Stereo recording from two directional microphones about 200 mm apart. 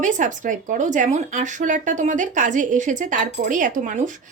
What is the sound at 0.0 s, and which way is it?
Speech, 40° right (ahead or behind).